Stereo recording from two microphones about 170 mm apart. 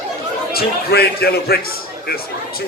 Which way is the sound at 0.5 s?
70° left (ahead or behind).